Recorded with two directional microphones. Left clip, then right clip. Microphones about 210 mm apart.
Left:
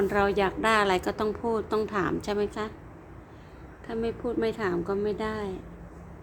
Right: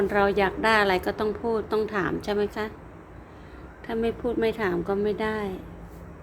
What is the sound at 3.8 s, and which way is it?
A woman's voice, 10° right (ahead or behind).